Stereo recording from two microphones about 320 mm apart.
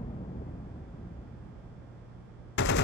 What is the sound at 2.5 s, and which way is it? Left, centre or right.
Machine gun, left.